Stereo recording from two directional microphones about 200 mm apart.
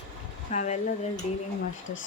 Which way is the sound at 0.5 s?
35° left (ahead or behind).